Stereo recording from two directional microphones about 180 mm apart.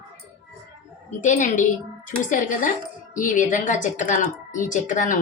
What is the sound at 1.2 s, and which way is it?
Speech, 45° left (ahead or behind).